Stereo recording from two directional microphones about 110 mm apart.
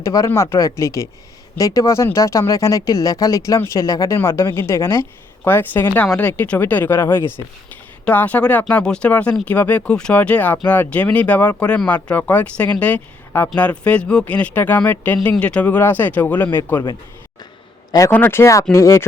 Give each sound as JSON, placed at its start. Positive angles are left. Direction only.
{"t": 0.0, "sound": "speech", "side_deg": 30}
{"t": 18.1, "sound": "speech", "side_deg": 20}